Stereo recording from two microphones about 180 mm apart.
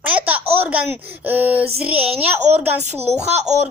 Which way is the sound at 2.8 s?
35° right (ahead or behind).